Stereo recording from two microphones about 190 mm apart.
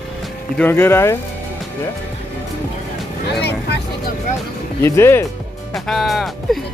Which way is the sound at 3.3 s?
60° left (ahead or behind).